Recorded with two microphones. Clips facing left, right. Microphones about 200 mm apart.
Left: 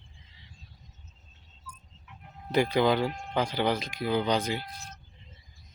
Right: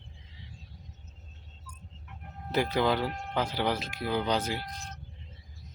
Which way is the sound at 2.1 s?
55° right (ahead or behind).